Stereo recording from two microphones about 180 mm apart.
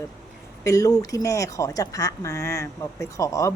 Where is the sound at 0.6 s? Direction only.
20° left (ahead or behind).